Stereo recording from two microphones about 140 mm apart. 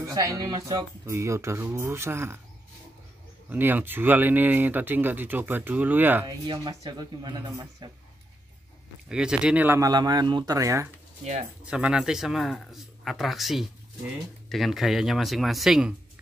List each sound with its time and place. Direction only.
0.0 s speech: 25° right (ahead or behind)
3.4 s speech: 15° right (ahead or behind)
6.2 s speech: 30° right (ahead or behind)
9.1 s speech: 5° right (ahead or behind)
9.8 s speech: 25° right (ahead or behind)
11.6 s speech: 5° right (ahead or behind)